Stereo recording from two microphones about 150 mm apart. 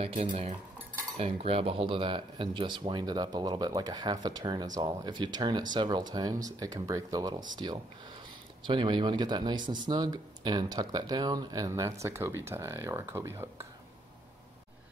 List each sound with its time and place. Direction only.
0.0 s cutlery: 50° right (ahead or behind)
1.1 s speech: 40° right (ahead or behind); by 13.7 s 20° right (ahead or behind)